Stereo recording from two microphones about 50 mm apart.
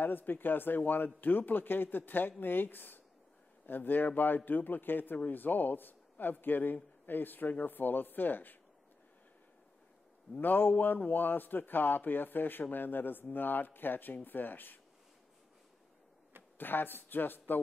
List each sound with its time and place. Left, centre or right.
0.0 s speech: left
10.3 s speech: left
16.5 s speech: left